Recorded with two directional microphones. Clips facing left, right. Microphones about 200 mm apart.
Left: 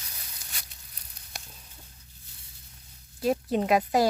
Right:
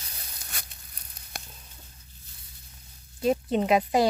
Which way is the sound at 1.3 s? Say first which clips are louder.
Right 3 dB; 55° right (ahead or behind).